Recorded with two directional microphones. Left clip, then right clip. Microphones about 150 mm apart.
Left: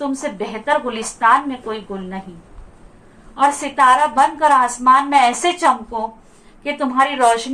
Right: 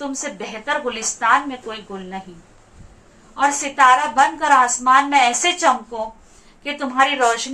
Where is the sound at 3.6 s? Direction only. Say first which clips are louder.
Even; 30° left (ahead or behind).